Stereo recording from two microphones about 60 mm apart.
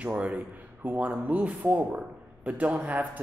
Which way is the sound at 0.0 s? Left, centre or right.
Right.